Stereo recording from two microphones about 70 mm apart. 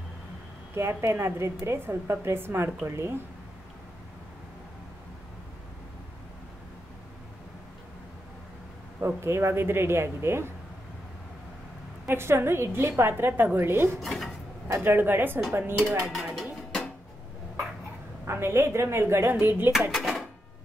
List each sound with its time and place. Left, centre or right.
0.7 s a woman's voice: right
9.0 s a woman's voice: right
12.1 s a woman's voice: right
13.9 s speech: centre
14.7 s a woman's voice: right
16.0 s speech: centre
18.2 s a woman's voice: right
19.9 s cash register: centre